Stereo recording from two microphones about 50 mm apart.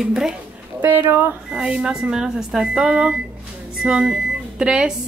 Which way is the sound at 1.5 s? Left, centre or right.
Centre.